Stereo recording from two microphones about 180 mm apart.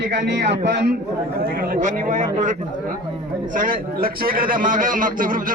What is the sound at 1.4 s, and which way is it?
A man's voice, 55° right (ahead or behind).